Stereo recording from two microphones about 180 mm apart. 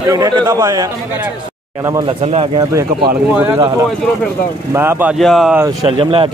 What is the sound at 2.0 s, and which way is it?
Speech, 35° right (ahead or behind).